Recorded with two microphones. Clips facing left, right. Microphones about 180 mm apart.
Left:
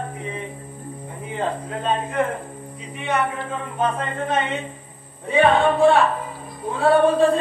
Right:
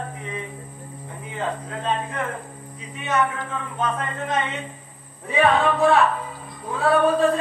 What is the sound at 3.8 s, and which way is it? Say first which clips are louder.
Music: left 3 dB; 30° left (ahead or behind).